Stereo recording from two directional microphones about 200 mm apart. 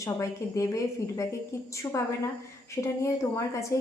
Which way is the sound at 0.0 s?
15° left (ahead or behind).